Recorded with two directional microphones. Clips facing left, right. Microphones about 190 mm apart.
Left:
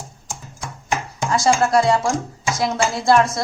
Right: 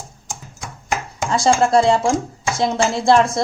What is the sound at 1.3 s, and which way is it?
Speech, 30° right (ahead or behind).